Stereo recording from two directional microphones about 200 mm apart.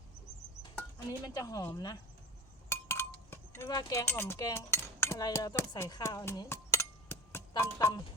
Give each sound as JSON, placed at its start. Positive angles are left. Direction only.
{"t": 0.9, "sound": "speech", "side_deg": 20}